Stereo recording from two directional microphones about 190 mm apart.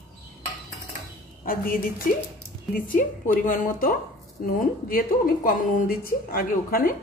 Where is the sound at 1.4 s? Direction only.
50° left (ahead or behind).